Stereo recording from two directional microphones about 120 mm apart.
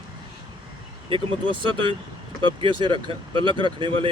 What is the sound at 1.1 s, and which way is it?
Speech, 45° right (ahead or behind).